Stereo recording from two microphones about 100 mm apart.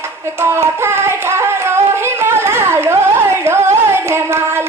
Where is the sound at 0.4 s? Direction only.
25° right (ahead or behind).